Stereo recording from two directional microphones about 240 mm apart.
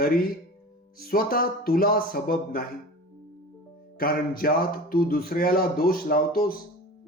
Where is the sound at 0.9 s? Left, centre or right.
Left.